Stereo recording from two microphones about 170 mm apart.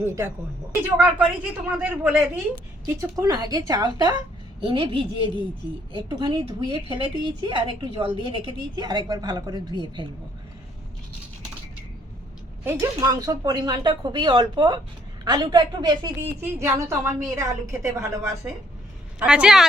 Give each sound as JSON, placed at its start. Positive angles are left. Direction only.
{"t": 0.0, "sound": "a woman's voice", "side_deg": -15}
{"t": 12.6, "sound": "speech", "side_deg": -15}
{"t": 16.2, "sound": "a woman's voice", "side_deg": -15}
{"t": 19.2, "sound": "a woman's voice", "side_deg": -5}